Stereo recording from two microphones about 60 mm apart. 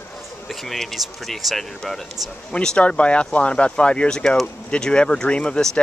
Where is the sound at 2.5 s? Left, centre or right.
Centre.